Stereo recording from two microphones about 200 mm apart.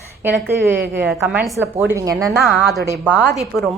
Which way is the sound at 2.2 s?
Centre (ahead or behind).